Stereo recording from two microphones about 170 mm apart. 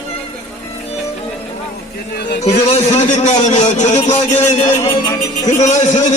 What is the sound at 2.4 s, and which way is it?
A man's voice, 40° left (ahead or behind).